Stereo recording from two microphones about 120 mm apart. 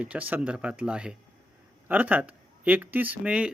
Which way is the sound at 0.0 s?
10° right (ahead or behind).